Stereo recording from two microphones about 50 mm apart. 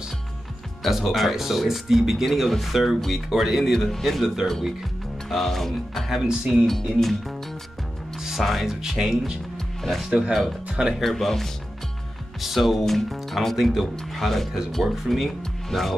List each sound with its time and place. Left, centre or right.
0.8 s speech: centre
5.3 s speech: centre
6.1 s speech: centre
6.7 s speech: centre
10.0 s speech: centre
11.1 s speech: centre